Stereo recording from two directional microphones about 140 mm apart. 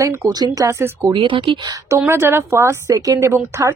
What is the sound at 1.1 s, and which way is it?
Speech, 35° right (ahead or behind).